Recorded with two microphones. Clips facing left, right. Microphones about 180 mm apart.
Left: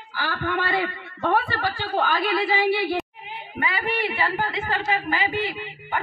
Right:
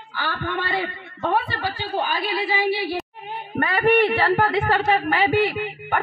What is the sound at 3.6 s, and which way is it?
A woman's voice, 60° right (ahead or behind).